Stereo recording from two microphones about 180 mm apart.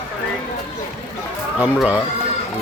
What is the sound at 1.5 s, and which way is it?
Speech, 5° right (ahead or behind).